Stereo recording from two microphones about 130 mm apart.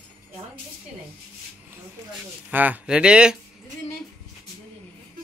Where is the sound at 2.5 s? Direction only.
10° right (ahead or behind).